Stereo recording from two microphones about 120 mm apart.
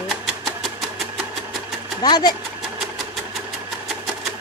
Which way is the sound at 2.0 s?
35° left (ahead or behind).